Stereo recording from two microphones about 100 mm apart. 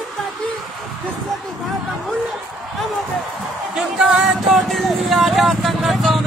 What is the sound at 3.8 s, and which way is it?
Vehicle, 5° right (ahead or behind).